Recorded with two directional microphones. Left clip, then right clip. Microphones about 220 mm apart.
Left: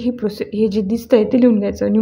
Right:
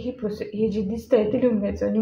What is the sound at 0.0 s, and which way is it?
A woman's voice, 45° left (ahead or behind).